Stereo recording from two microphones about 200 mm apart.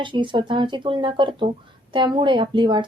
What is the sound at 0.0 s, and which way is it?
A woman's voice, 25° right (ahead or behind).